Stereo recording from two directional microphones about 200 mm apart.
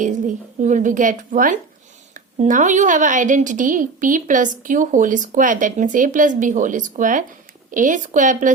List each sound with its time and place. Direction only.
0.0 s a woman's voice: 40° right (ahead or behind)